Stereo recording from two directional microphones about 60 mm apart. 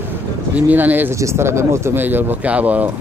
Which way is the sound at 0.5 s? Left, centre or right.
Right.